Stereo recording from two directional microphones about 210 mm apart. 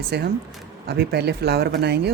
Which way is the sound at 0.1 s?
50° right (ahead or behind).